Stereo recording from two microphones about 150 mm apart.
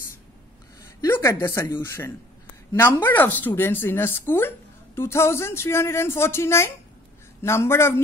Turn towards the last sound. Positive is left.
turn(degrees=15)  # may be behind; listen again after turning